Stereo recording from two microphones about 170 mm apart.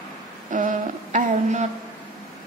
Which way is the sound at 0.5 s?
50° right (ahead or behind).